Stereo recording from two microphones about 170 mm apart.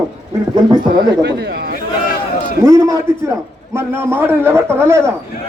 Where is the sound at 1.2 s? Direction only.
70° right (ahead or behind).